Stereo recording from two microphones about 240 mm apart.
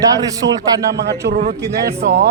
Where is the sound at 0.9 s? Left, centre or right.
Right.